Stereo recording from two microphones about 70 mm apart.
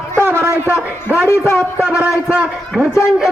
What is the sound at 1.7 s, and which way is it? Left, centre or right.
Speech, centre.